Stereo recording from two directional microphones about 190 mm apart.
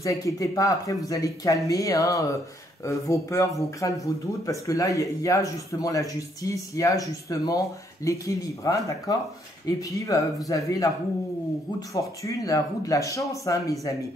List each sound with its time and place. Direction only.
0.0 s speech: 20° left (ahead or behind)
11.9 s speech: 15° left (ahead or behind)